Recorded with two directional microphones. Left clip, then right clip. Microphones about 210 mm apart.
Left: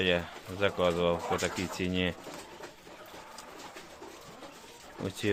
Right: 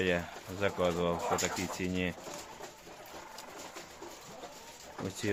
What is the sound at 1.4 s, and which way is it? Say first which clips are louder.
Speech: left 2 dB; 15° left (ahead or behind).